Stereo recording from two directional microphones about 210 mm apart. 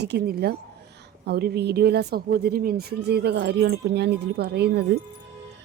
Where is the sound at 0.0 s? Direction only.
50° right (ahead or behind).